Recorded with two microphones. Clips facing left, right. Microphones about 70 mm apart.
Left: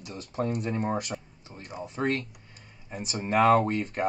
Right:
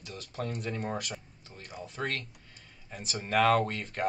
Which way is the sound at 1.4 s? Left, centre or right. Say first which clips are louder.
Left 4 dB; left.